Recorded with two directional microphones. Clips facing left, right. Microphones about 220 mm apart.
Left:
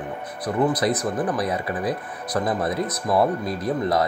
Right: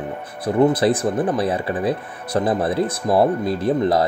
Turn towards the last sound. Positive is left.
turn(degrees=-30)  # may be behind; listen again after turning